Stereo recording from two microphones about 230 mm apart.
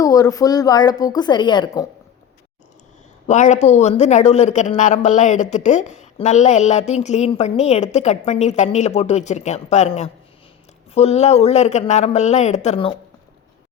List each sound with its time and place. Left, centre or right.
0.0 s a woman's voice: centre
3.2 s a man's voice: left